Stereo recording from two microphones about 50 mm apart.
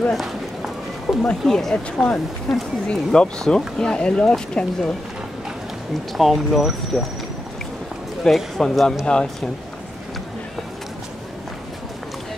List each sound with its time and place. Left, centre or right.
0.1 s run: centre
1.1 s a sound: centre
1.4 s speech: centre
2.9 s speech: centre
6.1 s speech: centre
8.3 s speech: centre